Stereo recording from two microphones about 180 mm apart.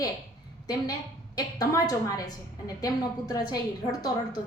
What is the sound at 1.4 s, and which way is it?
A woman's voice, 20° left (ahead or behind).